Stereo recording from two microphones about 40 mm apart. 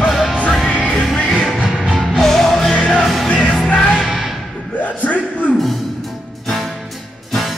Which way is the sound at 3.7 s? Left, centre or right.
Left.